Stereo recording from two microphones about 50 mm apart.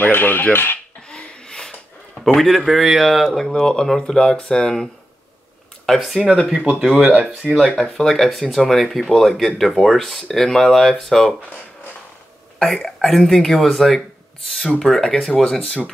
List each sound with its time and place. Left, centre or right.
0.0 s speech: left
1.0 s speech: centre
5.9 s speech: centre
6.4 s speech: centre
12.5 s speech: centre